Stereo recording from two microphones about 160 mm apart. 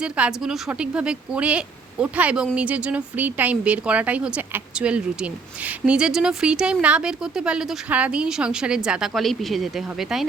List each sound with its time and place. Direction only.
0.0 s speech: 5° right (ahead or behind)